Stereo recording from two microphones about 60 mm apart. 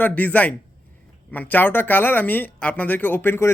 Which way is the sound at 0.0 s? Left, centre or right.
Left.